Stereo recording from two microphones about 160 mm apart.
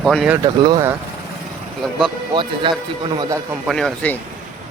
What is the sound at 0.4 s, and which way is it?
Speech, 25° right (ahead or behind).